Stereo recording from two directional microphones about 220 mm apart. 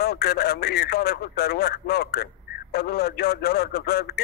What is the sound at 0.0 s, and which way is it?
Speech, 45° left (ahead or behind).